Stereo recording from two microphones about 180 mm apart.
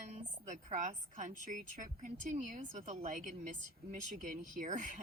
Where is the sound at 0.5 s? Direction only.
45° right (ahead or behind).